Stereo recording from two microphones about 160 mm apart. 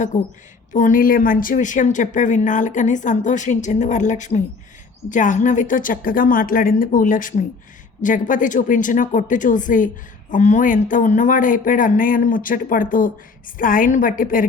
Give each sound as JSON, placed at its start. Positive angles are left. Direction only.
{"t": 0.1, "sound": "speech", "side_deg": 55}